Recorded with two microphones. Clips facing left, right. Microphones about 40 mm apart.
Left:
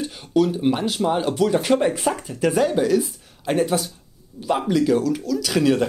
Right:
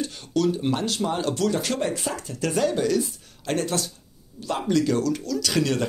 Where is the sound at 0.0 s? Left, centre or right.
Centre.